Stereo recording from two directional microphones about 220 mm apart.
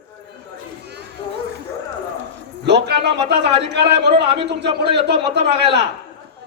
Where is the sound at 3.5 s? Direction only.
50° right (ahead or behind).